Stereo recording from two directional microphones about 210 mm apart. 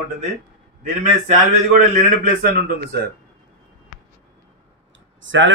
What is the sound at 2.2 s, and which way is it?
Speech, 45° right (ahead or behind).